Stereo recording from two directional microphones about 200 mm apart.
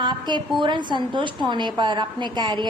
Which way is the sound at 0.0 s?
20° right (ahead or behind).